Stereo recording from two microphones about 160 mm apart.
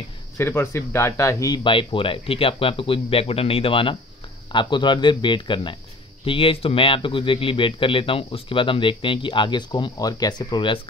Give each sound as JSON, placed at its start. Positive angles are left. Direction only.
{"t": 0.4, "sound": "a man's voice", "side_deg": 15}